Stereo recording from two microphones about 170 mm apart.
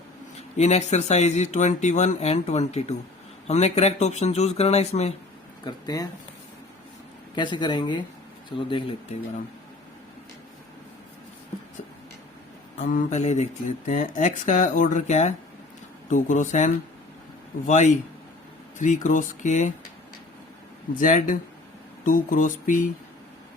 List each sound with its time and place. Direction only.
0.3 s speech: 40° left (ahead or behind)
5.6 s speech: 25° left (ahead or behind)
7.3 s speech: 25° left (ahead or behind)
12.8 s speech: 50° left (ahead or behind)
21.0 s speech: 50° left (ahead or behind)